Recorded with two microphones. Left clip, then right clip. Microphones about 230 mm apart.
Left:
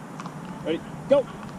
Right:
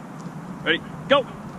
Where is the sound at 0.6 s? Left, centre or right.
Centre.